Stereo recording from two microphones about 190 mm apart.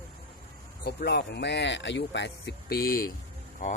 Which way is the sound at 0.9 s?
60° left (ahead or behind).